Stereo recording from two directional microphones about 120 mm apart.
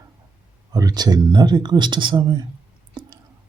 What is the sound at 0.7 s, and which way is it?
Speech, 30° right (ahead or behind).